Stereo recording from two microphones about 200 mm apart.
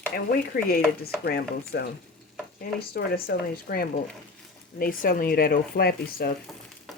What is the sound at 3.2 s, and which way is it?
Speech, 50° left (ahead or behind).